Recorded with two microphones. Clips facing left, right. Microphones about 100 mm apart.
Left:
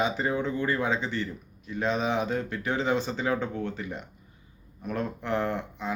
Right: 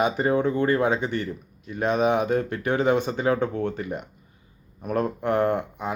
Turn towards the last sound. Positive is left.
turn(degrees=-50)  # may be behind; listen again after turning